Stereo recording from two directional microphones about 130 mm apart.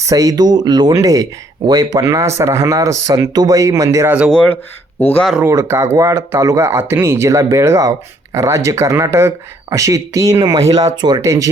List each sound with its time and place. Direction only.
0.0 s speech: 25° right (ahead or behind)
4.3 s speech: 5° left (ahead or behind)
5.5 s speech: 20° right (ahead or behind)